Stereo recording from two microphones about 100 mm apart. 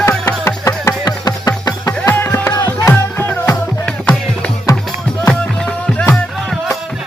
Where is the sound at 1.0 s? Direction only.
45° left (ahead or behind).